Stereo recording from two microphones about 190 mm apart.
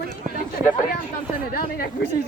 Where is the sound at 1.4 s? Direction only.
50° left (ahead or behind).